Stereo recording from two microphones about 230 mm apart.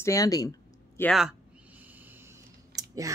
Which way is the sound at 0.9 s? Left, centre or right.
Centre.